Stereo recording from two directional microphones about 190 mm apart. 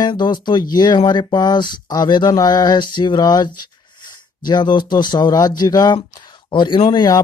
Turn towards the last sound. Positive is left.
turn(degrees=20)  # may be behind; listen again after turning